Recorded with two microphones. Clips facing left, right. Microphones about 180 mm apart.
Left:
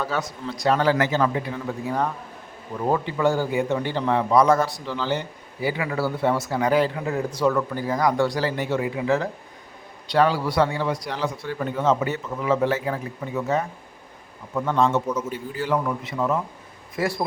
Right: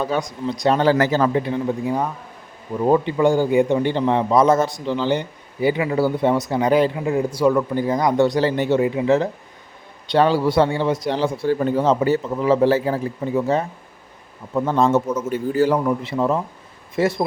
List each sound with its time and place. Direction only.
0.0 s a man's voice: 20° right (ahead or behind)
2.9 s a man's voice: 20° right (ahead or behind)